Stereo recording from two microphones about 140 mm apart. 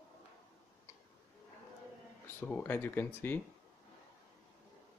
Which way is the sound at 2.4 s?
10° left (ahead or behind).